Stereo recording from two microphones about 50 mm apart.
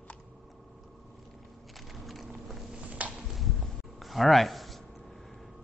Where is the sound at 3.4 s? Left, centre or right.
Centre.